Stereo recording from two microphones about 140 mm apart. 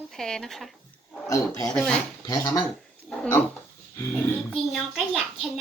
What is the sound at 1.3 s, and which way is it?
Speech, 25° left (ahead or behind).